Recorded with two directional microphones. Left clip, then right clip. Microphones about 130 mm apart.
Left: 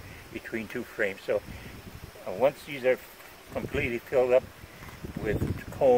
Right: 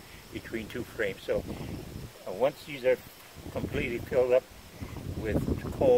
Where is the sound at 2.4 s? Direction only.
15° right (ahead or behind).